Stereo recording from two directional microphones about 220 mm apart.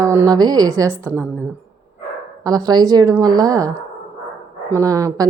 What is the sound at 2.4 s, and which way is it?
A woman's voice, 15° right (ahead or behind).